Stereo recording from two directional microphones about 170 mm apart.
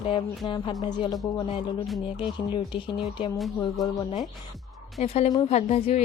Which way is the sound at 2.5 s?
30° left (ahead or behind).